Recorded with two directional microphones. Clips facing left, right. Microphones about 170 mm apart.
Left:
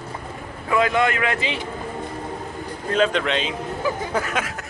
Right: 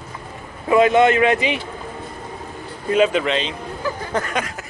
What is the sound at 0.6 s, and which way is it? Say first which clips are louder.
Speech: right 6 dB; 25° right (ahead or behind).